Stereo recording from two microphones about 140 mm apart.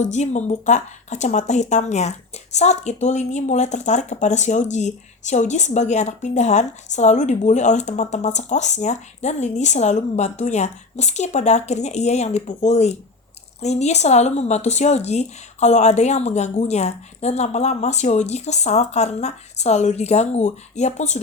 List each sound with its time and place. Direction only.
0.0 s a woman's voice: 55° left (ahead or behind)